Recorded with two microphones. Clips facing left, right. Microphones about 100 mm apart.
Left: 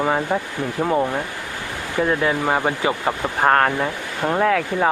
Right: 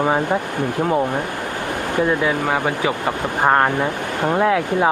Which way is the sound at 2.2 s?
10° left (ahead or behind).